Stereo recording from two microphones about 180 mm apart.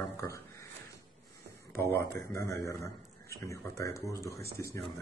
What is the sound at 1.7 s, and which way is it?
A man's voice, 15° left (ahead or behind).